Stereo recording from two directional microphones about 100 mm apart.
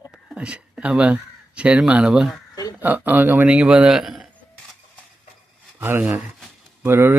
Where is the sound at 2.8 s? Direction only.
20° right (ahead or behind); by 4.2 s 5° right (ahead or behind).